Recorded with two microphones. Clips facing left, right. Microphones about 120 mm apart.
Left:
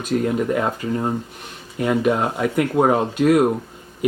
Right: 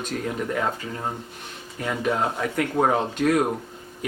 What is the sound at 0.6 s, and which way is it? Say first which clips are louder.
Speech: left 5 dB; 15° left (ahead or behind).